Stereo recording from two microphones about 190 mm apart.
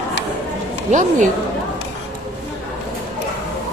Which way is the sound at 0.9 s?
40° right (ahead or behind).